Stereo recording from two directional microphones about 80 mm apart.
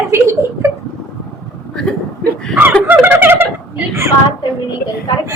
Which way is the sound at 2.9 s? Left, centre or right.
Right.